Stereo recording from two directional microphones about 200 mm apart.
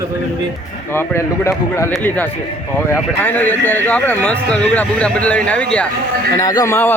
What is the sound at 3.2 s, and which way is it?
Speech, 10° left (ahead or behind).